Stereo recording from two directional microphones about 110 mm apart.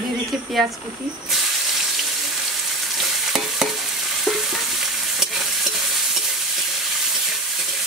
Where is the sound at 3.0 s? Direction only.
5° right (ahead or behind).